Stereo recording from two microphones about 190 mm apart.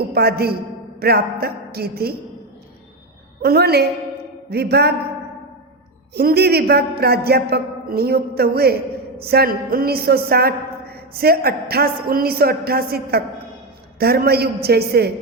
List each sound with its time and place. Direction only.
0.1 s a man's voice: 55° right (ahead or behind)
3.4 s a man's voice: 55° right (ahead or behind)
6.1 s a man's voice: 55° right (ahead or behind)